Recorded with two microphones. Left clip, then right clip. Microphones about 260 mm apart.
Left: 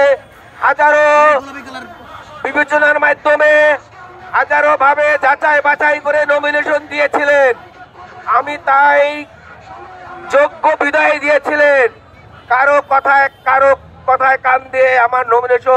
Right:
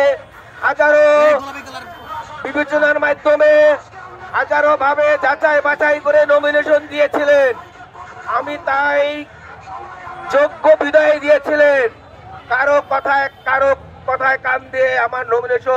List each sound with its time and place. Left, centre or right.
0.0 s a man's voice: centre
1.4 s speech: right
2.4 s a man's voice: centre
10.3 s a man's voice: centre